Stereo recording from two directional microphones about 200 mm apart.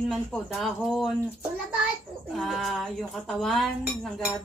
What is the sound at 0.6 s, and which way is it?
Speech, centre (ahead or behind).